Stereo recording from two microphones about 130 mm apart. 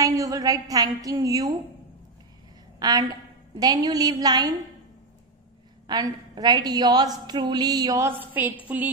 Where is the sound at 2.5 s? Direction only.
30° right (ahead or behind).